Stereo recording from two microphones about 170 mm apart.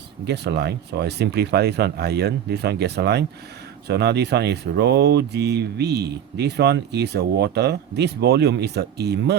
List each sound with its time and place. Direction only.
0.3 s speech: 75° right (ahead or behind)